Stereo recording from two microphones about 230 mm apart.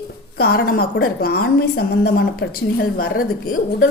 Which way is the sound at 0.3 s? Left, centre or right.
Left.